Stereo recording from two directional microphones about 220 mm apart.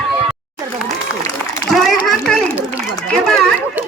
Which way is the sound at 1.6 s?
Centre (ahead or behind).